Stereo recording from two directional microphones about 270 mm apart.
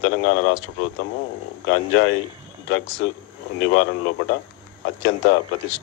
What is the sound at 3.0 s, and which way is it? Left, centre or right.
A man's voice, left.